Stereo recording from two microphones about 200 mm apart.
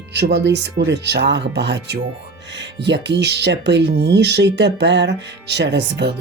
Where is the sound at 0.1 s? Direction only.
60° right (ahead or behind).